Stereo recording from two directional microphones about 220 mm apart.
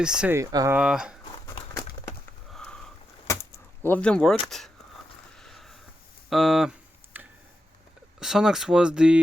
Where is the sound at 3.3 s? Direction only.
10° left (ahead or behind).